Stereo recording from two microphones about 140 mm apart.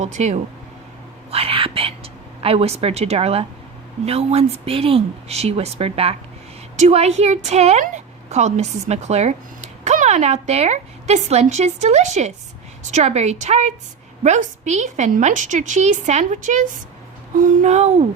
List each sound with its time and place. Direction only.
0.0 s a woman's voice: 55° right (ahead or behind)
1.3 s a woman's voice: 40° right (ahead or behind)